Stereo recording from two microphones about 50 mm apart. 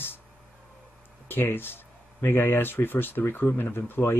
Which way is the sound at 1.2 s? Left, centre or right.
Left.